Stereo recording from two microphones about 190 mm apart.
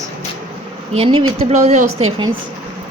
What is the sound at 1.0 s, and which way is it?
Speech, 30° right (ahead or behind).